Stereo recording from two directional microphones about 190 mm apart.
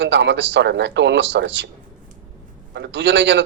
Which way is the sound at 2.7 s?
70° right (ahead or behind).